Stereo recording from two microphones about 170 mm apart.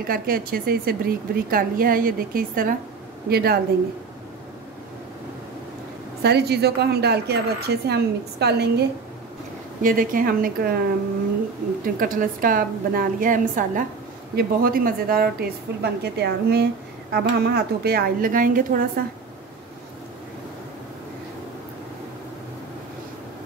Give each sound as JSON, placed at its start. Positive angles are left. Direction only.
{"t": 0.0, "sound": "a woman's voice", "side_deg": -60}
{"t": 6.2, "sound": "a woman's voice", "side_deg": -75}
{"t": 9.8, "sound": "speech", "side_deg": -55}
{"t": 11.8, "sound": "a woman's voice", "side_deg": -55}